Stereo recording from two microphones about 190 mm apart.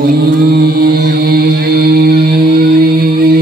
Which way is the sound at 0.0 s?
55° right (ahead or behind).